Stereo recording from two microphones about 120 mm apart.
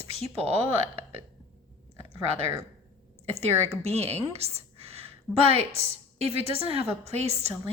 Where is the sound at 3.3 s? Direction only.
60° right (ahead or behind).